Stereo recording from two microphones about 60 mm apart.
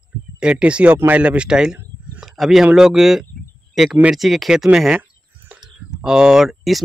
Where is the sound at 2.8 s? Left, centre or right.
Centre.